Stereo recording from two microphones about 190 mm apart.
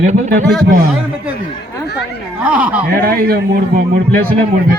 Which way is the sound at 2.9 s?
55° right (ahead or behind).